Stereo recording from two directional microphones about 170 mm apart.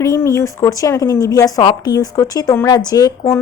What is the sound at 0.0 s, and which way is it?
Speech, 20° left (ahead or behind).